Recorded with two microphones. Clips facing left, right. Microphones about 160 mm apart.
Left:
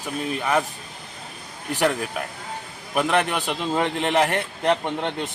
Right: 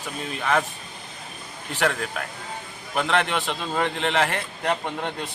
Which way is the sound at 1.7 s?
15° left (ahead or behind).